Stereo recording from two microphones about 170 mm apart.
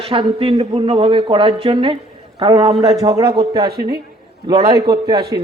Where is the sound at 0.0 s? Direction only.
35° right (ahead or behind).